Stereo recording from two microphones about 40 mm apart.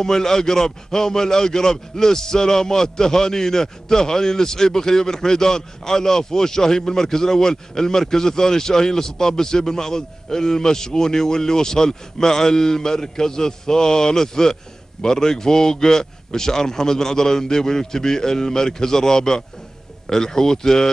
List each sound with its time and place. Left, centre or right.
0.0 s a man's voice: centre